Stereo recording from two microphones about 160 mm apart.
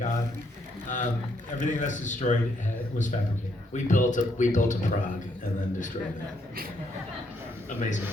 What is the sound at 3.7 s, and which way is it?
A man's voice, 50° left (ahead or behind).